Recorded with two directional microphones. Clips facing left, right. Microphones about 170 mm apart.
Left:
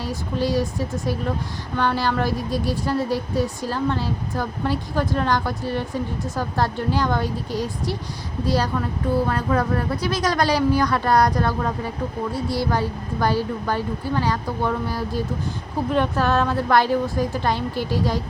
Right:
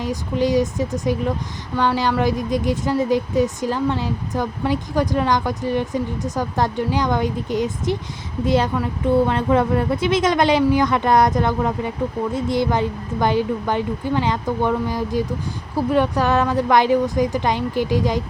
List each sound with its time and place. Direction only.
0.0 s speech: 15° right (ahead or behind)